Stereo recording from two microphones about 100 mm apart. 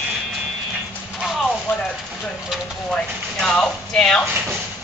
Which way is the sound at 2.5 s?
5° right (ahead or behind).